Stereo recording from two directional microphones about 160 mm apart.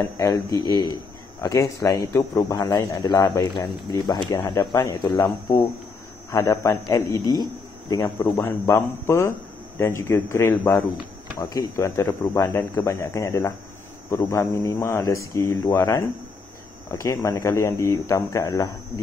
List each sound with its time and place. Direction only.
0.0 s speech: 20° left (ahead or behind)